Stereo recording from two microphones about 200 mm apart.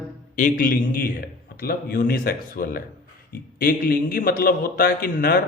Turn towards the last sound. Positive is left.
turn(degrees=45)  # may be behind; listen again after turning